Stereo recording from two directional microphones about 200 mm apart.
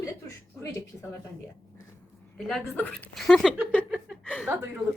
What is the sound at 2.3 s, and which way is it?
A woman's voice, centre (ahead or behind).